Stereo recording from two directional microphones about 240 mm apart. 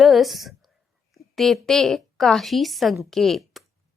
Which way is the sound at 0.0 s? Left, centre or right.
Centre.